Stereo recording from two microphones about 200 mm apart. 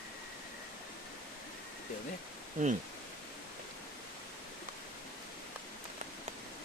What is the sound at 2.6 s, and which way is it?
Speech, 40° right (ahead or behind).